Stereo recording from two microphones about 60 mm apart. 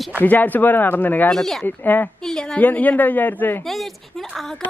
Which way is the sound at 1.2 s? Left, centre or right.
Centre.